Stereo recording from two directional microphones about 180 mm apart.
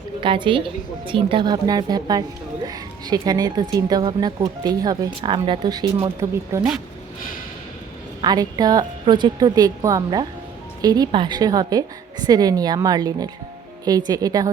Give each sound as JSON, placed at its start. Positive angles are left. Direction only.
{"t": 0.2, "sound": "speech", "side_deg": -25}
{"t": 8.2, "sound": "speech", "side_deg": -20}